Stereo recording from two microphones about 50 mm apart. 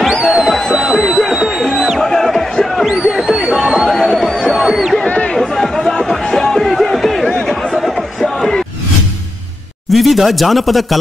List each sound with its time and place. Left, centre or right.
0.0 s music: centre
2.0 s music: centre
2.9 s a sound: centre
3.9 s a sound: centre
4.5 s crowd: centre
5.0 s a sound: left
5.4 s chatter: centre
7.8 s crowd: centre
9.8 s speech: centre